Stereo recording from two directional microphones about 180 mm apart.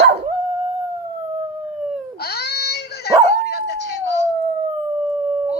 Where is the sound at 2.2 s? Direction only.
60° left (ahead or behind).